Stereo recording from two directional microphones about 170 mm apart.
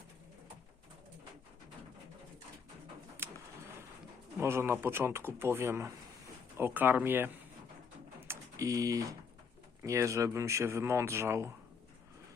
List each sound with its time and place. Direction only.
3.2 s pigeon: 15° right (ahead or behind)
4.4 s speech: 15° right (ahead or behind)
8.3 s speech: 20° right (ahead or behind)